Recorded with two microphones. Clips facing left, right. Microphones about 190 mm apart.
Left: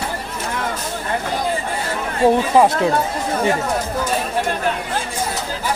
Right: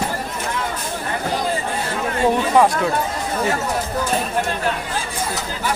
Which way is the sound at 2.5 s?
25° left (ahead or behind).